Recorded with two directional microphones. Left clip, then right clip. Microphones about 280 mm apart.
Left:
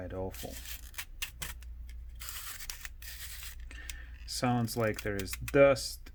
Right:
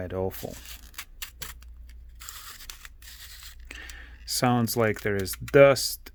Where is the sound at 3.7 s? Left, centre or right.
Right.